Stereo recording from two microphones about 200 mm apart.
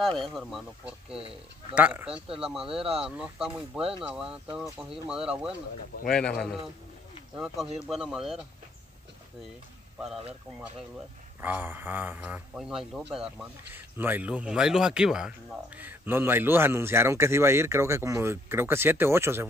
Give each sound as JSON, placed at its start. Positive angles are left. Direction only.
{"t": 0.0, "sound": "speech", "side_deg": 0}
{"t": 1.1, "sound": "speech", "side_deg": -30}
{"t": 1.8, "sound": "a man's voice", "side_deg": -5}
{"t": 11.4, "sound": "a man's voice", "side_deg": -10}